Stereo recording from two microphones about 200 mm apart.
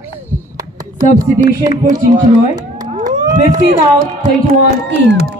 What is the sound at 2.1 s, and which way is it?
Speech, 40° right (ahead or behind).